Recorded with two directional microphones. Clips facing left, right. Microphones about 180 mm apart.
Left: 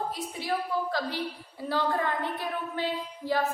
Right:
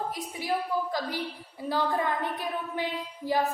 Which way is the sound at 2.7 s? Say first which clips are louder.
Left 1 dB; 15° right (ahead or behind).